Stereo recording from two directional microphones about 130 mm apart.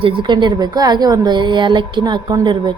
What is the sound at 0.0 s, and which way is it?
A woman's voice, 35° right (ahead or behind).